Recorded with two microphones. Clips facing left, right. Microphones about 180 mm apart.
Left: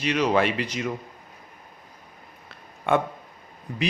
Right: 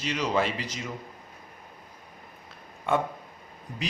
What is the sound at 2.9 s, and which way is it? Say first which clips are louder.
Speech: left 4 dB; 70° left (ahead or behind).